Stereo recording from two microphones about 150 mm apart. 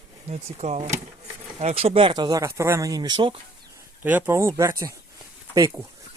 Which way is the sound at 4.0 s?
15° right (ahead or behind).